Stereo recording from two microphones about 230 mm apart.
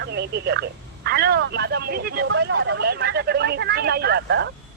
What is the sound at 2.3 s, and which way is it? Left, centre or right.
A woman's voice, right.